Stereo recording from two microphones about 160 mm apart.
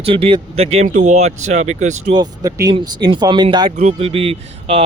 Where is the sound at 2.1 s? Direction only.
25° right (ahead or behind).